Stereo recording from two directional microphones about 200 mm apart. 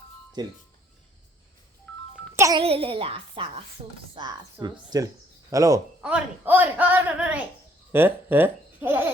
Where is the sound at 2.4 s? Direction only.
15° right (ahead or behind).